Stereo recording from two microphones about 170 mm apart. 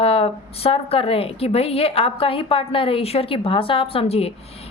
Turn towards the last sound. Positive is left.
turn(degrees=35)  # may be behind; listen again after turning